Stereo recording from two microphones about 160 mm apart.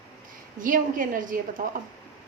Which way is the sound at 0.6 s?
55° right (ahead or behind).